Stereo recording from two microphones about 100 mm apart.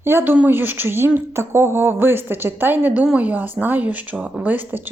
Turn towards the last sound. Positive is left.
turn(degrees=-15)  # may be behind; listen again after turning